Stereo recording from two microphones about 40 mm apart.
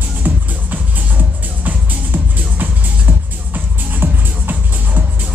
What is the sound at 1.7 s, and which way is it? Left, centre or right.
Music, right.